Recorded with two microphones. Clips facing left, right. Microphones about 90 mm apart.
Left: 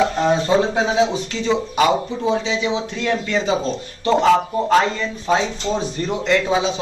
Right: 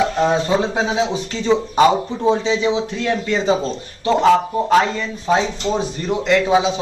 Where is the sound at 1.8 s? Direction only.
30° right (ahead or behind).